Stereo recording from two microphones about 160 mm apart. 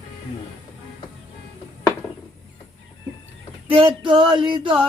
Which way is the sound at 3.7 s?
30° right (ahead or behind).